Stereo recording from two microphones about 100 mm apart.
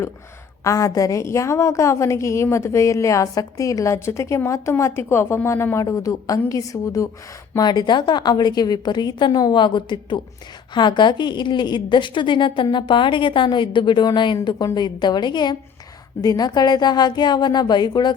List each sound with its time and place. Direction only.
0.6 s a woman's voice: 35° left (ahead or behind)
7.6 s a woman's voice: 45° left (ahead or behind)